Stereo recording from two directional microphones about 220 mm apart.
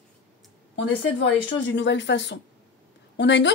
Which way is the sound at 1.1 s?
55° left (ahead or behind).